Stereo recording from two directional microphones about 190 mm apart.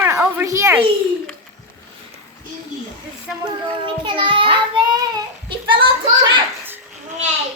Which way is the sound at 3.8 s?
25° right (ahead or behind).